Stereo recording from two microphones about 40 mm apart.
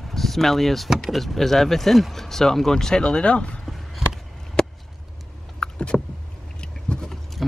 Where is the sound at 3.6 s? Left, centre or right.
Centre.